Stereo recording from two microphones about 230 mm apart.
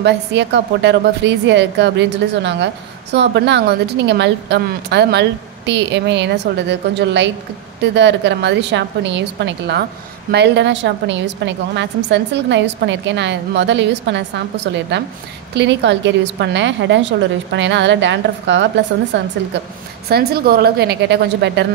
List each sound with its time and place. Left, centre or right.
0.0 s a woman's voice: right